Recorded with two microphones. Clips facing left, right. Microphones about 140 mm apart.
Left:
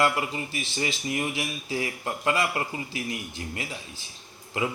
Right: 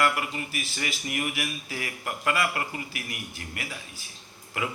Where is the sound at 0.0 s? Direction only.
25° left (ahead or behind).